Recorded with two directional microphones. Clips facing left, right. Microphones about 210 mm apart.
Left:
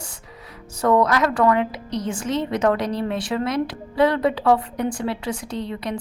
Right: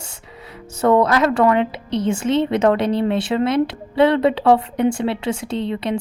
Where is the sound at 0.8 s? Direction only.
25° right (ahead or behind).